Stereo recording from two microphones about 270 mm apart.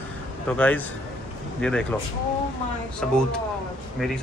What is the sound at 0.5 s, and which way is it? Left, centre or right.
Speech, centre.